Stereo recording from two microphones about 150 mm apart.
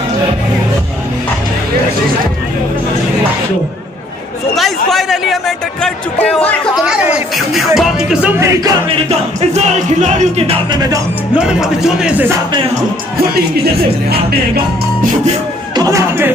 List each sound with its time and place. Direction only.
4.6 s speech: centre (ahead or behind)
8.4 s music: 20° right (ahead or behind)
8.9 s music: 45° right (ahead or behind)
10.7 s music: 25° right (ahead or behind)
11.3 s speech: 5° right (ahead or behind)
15.7 s speech: 25° right (ahead or behind)